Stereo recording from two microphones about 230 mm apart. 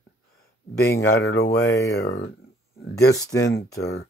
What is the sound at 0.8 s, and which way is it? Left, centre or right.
Speech, centre.